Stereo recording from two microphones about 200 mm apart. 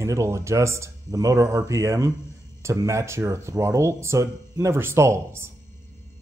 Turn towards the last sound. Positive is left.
turn(degrees=-15)  # may be behind; listen again after turning